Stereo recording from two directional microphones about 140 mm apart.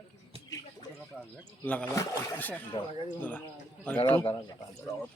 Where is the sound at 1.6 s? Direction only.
10° left (ahead or behind).